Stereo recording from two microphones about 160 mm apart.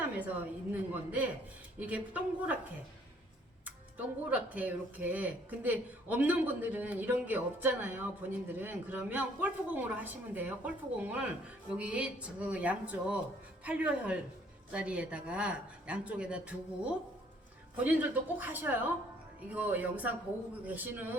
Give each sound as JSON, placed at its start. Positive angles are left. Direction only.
{"t": 0.7, "sound": "speech", "side_deg": -10}
{"t": 3.9, "sound": "speech", "side_deg": -10}